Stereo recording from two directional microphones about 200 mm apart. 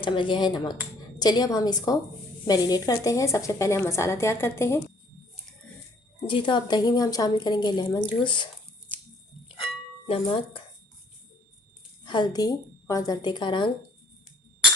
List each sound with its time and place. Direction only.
0.0 s a woman's voice: 25° left (ahead or behind)
6.2 s a woman's voice: 25° left (ahead or behind)
10.1 s a woman's voice: 25° left (ahead or behind)
12.0 s a woman's voice: 20° left (ahead or behind)